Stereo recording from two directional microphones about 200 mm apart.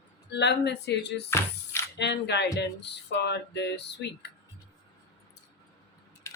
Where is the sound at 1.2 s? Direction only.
10° left (ahead or behind).